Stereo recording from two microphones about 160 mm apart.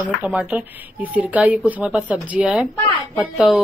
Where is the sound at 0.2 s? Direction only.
5° right (ahead or behind).